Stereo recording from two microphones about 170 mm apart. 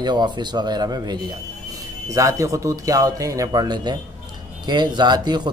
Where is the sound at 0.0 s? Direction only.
25° right (ahead or behind).